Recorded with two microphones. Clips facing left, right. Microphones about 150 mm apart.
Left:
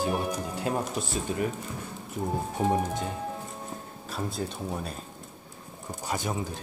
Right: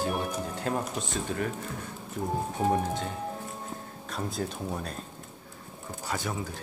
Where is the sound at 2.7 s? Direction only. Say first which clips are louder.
Left 1 dB; 10° left (ahead or behind).